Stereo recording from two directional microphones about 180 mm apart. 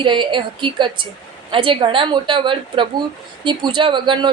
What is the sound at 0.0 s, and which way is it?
A woman's voice, 25° right (ahead or behind).